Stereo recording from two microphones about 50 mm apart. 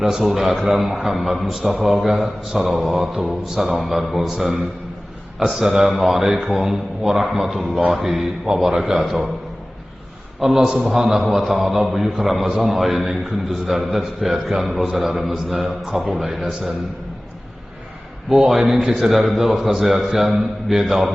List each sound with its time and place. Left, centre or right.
0.0 s a man's voice: centre
10.4 s a man's voice: centre
18.3 s a man's voice: centre